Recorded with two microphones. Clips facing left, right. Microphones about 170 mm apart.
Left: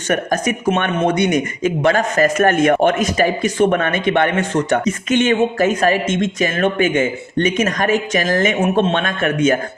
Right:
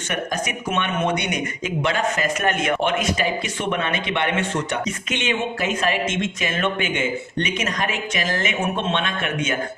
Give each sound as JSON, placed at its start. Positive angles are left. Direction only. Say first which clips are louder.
{"t": 0.1, "sound": "speech", "louder": "left 8 dB", "side_deg": 45}